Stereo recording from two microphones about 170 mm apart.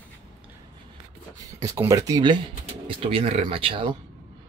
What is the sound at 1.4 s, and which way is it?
Speech, 20° right (ahead or behind).